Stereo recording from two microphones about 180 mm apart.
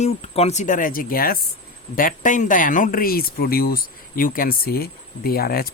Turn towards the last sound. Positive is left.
turn(degrees=55)  # may be behind; listen again after turning